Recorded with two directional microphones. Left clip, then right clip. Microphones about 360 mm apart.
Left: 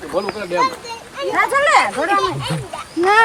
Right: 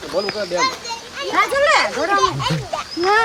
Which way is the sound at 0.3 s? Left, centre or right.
Centre.